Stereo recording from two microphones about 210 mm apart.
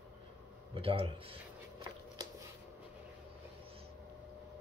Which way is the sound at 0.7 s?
25° right (ahead or behind).